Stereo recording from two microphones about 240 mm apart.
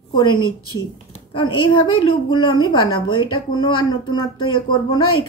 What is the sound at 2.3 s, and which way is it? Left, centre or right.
Speech, centre.